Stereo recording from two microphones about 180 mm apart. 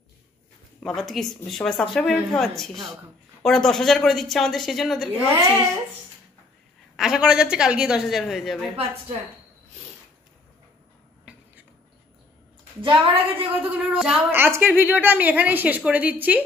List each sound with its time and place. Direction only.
0.8 s speech: centre (ahead or behind)
5.4 s a woman's voice: 15° right (ahead or behind)
7.0 s speech: 5° right (ahead or behind)
12.8 s a woman's voice: 30° right (ahead or behind)
13.7 s a woman's voice: 5° right (ahead or behind)